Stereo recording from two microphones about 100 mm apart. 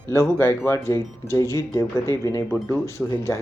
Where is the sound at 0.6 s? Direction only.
30° left (ahead or behind).